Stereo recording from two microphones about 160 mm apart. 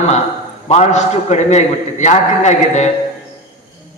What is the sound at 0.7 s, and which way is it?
A man's voice, 45° left (ahead or behind).